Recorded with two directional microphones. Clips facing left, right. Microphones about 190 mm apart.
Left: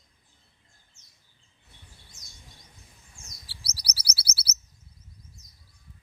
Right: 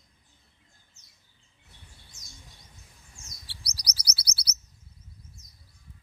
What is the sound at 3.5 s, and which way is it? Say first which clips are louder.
Chirp: right 1 dB; 5° left (ahead or behind).